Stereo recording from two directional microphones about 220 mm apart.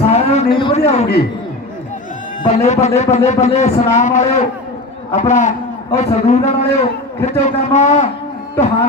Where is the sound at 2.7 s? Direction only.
30° left (ahead or behind).